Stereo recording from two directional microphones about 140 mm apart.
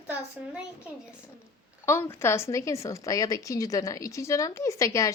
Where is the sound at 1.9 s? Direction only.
20° left (ahead or behind).